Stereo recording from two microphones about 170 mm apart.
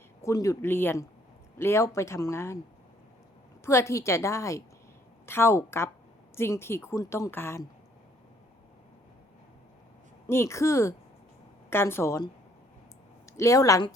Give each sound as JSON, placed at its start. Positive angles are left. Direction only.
{"t": 0.2, "sound": "speech", "side_deg": 20}
{"t": 3.6, "sound": "speech", "side_deg": 15}
{"t": 10.2, "sound": "speech", "side_deg": 15}
{"t": 13.3, "sound": "speech", "side_deg": 20}